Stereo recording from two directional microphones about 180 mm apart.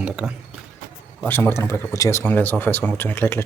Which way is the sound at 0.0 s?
5° right (ahead or behind).